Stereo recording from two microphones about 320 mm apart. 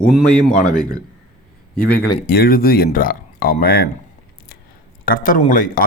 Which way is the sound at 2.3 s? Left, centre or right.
Left.